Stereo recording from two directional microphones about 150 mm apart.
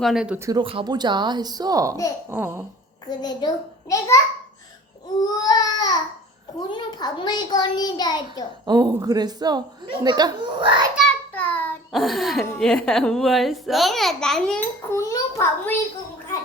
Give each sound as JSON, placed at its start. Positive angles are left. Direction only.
{"t": 0.0, "sound": "a child's voice", "side_deg": -5}
{"t": 0.3, "sound": "a woman's voice", "side_deg": -20}
{"t": 0.6, "sound": "a woman's voice", "side_deg": -35}
{"t": 2.3, "sound": "babbling", "side_deg": -15}
{"t": 3.1, "sound": "a child's voice", "side_deg": 25}
{"t": 5.2, "sound": "a child's voice", "side_deg": 25}
{"t": 8.6, "sound": "a woman's voice", "side_deg": -25}
{"t": 11.3, "sound": "child singing", "side_deg": 10}
{"t": 11.9, "sound": "a child's voice", "side_deg": 0}
{"t": 14.8, "sound": "a child's voice", "side_deg": 20}